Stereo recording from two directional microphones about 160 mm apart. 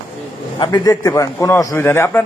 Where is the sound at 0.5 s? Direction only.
30° left (ahead or behind); by 2.2 s 15° left (ahead or behind).